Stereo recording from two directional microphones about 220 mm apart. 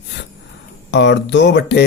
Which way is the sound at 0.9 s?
50° left (ahead or behind).